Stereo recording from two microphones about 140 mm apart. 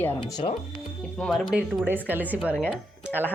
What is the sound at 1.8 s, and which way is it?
A woman's voice, 15° right (ahead or behind).